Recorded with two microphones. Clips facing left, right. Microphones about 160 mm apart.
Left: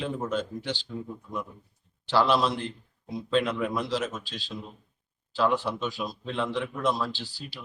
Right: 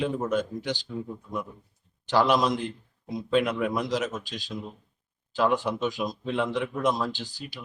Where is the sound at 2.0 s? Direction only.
15° right (ahead or behind).